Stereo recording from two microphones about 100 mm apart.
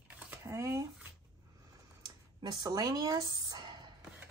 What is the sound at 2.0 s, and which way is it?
Speech, 45° right (ahead or behind).